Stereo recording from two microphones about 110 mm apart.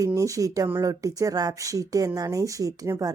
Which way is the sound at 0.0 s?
30° right (ahead or behind).